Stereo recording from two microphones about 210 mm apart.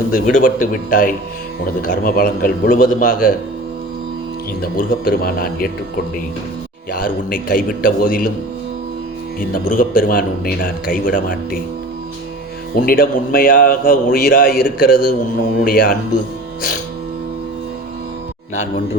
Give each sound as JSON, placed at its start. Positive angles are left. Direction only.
{"t": 0.1, "sound": "a man's voice", "side_deg": 40}
{"t": 4.6, "sound": "a man's voice", "side_deg": 45}
{"t": 6.9, "sound": "a man's voice", "side_deg": 40}
{"t": 9.6, "sound": "a man's voice", "side_deg": 40}
{"t": 12.7, "sound": "a man's voice", "side_deg": 45}